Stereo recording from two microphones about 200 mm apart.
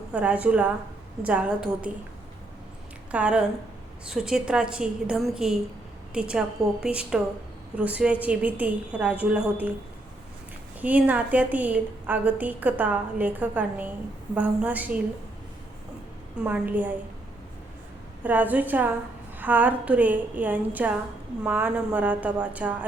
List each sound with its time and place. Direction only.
0.1 s a woman's voice: 5° right (ahead or behind)
3.1 s a woman's voice: 5° right (ahead or behind)
10.8 s a woman's voice: 10° right (ahead or behind)
16.4 s a woman's voice: 10° right (ahead or behind)
18.2 s a woman's voice: 10° right (ahead or behind)